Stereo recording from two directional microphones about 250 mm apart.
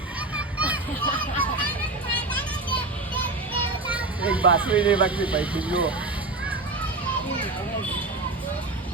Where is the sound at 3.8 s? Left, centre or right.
Centre.